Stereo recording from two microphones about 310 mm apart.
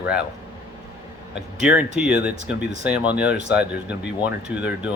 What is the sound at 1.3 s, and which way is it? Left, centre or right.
Speech, centre.